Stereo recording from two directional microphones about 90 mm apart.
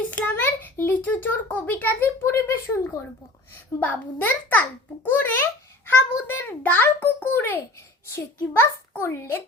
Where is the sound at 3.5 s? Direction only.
20° left (ahead or behind).